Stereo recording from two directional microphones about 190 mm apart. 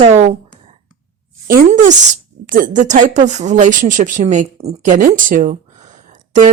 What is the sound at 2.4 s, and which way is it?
A woman's voice, 45° right (ahead or behind).